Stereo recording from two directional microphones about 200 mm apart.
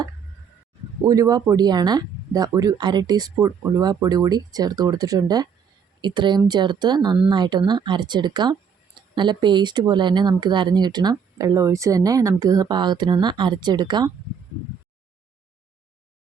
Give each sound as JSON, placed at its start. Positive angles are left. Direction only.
{"t": 1.0, "sound": "speech", "side_deg": -20}